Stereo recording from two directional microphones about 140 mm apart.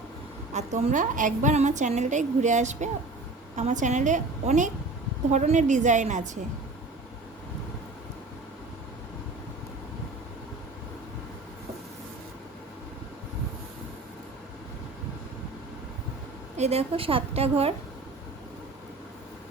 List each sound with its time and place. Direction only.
0.5 s a woman's voice: 55° right (ahead or behind)
16.6 s a woman's voice: 50° right (ahead or behind)